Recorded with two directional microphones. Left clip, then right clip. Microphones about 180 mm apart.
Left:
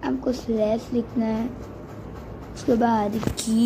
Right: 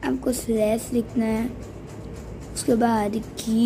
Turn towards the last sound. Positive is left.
turn(degrees=-10)  # may be behind; listen again after turning